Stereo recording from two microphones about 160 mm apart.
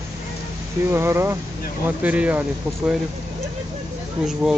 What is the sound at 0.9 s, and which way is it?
Speech, 15° right (ahead or behind).